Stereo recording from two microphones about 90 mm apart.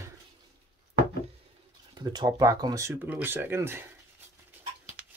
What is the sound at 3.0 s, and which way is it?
Speech, 20° right (ahead or behind).